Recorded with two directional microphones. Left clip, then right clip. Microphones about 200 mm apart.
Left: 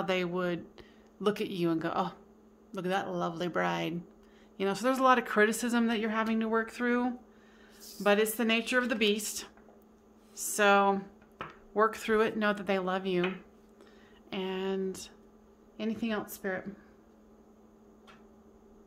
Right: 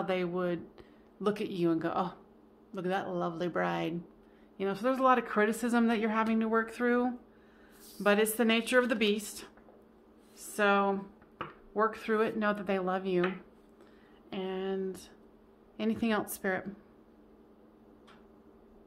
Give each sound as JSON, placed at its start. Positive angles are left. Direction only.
{"t": 0.0, "sound": "speech", "side_deg": 15}
{"t": 8.0, "sound": "speech", "side_deg": -5}
{"t": 14.3, "sound": "speech", "side_deg": 10}
{"t": 15.8, "sound": "a woman's voice", "side_deg": -10}